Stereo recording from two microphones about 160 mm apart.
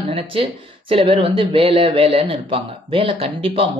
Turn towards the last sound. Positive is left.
turn(degrees=-35)  # may be behind; listen again after turning